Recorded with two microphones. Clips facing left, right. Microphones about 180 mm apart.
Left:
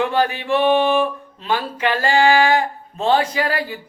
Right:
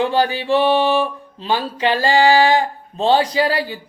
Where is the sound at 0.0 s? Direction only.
35° right (ahead or behind).